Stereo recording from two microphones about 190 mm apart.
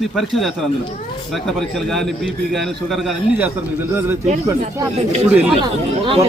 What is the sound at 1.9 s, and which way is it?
A man's voice, centre (ahead or behind).